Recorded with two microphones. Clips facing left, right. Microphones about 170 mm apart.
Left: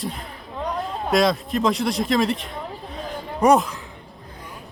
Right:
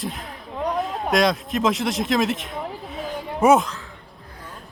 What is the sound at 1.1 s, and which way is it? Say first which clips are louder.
Speech: left 1 dB; centre (ahead or behind).